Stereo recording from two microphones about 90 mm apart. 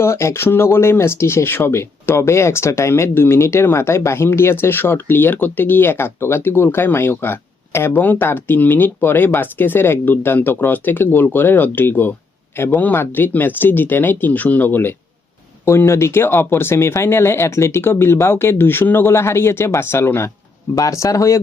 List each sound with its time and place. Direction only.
0.0 s speech: 30° left (ahead or behind)
20.7 s speech: 40° left (ahead or behind)